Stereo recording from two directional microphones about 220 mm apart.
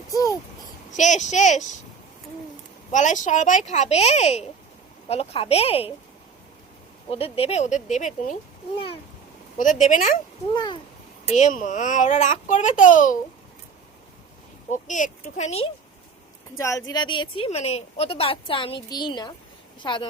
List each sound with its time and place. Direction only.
0.1 s a sound: 15° left (ahead or behind)
0.9 s a child's voice: 35° left (ahead or behind)
2.9 s a child's voice: 35° left (ahead or behind)
7.3 s a child's voice: 30° left (ahead or behind)
9.6 s a child's voice: 35° left (ahead or behind)
10.5 s a woman's voice: 20° left (ahead or behind)
11.3 s a child's voice: 35° left (ahead or behind)
14.7 s a child's voice: 35° left (ahead or behind)
16.6 s a woman's voice: 15° left (ahead or behind)